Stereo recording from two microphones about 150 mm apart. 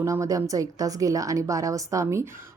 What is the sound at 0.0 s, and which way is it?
A woman's voice, 20° right (ahead or behind).